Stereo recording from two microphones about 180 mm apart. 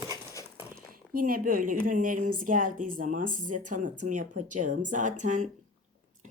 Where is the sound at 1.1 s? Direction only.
50° right (ahead or behind).